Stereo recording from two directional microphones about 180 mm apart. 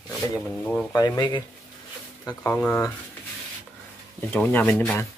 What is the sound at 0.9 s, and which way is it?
Speech, 20° left (ahead or behind).